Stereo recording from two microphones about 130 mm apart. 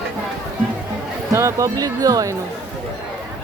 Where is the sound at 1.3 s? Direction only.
20° right (ahead or behind).